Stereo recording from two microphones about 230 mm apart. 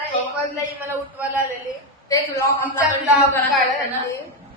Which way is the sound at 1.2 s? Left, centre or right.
Centre.